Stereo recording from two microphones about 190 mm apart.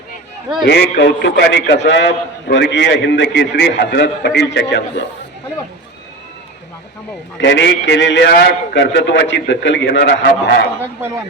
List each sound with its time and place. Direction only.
0.6 s a man's voice: 65° left (ahead or behind)
7.3 s a man's voice: 70° left (ahead or behind)